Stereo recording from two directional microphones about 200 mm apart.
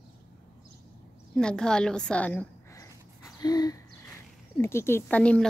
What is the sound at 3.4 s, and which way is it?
Owl, 20° left (ahead or behind).